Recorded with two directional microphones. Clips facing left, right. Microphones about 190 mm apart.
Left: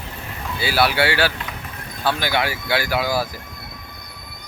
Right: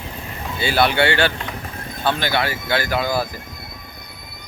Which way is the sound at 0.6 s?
5° left (ahead or behind).